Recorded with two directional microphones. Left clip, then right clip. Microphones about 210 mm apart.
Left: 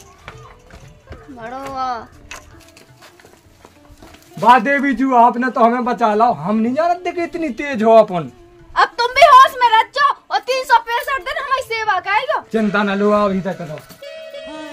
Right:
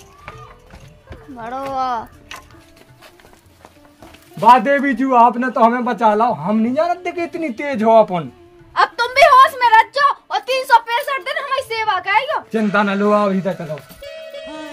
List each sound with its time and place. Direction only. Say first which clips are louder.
1.4 s speech: right 2 dB; 35° right (ahead or behind)
4.5 s a man's voice: right 1 dB; 5° right (ahead or behind)
8.7 s a sound: left 1 dB; 10° left (ahead or behind)
12.4 s a sound: left 1 dB; centre (ahead or behind)
12.7 s speech: right 3 dB; 15° right (ahead or behind)
13.0 s music: even; 10° right (ahead or behind)